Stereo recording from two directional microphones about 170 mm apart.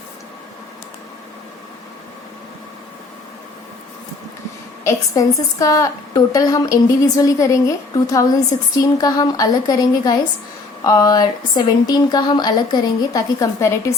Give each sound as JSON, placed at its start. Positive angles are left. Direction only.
{"t": 4.8, "sound": "a woman's voice", "side_deg": 20}